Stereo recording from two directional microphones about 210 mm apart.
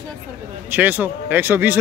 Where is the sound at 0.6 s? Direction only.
10° right (ahead or behind).